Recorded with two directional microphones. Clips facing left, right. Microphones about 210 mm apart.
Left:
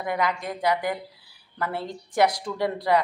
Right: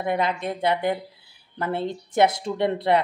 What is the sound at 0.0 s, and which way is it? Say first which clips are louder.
Speech: right 2 dB; 25° right (ahead or behind).